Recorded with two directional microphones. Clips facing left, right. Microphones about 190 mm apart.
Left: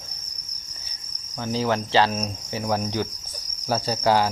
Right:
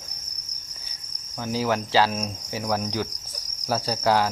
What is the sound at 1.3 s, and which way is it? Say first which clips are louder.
Cricket: left 1 dB; 5° right (ahead or behind).